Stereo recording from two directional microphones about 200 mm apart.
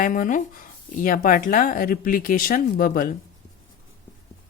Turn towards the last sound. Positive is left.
turn(degrees=45)  # may be behind; listen again after turning